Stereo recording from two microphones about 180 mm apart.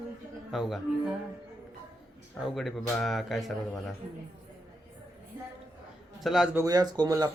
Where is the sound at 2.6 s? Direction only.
Centre (ahead or behind).